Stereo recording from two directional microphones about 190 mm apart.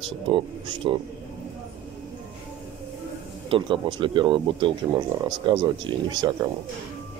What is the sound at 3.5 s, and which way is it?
Speech, 25° right (ahead or behind).